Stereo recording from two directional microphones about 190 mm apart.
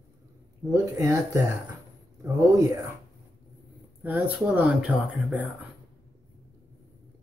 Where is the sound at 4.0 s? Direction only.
10° right (ahead or behind).